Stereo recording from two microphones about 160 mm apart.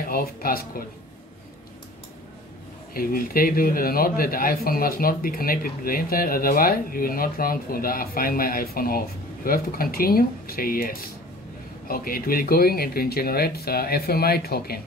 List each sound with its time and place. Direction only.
0.0 s speech: 65° left (ahead or behind)
2.9 s speech: 65° left (ahead or behind)